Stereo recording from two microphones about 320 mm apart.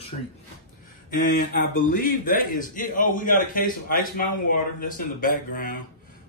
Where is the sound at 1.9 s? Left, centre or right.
Left.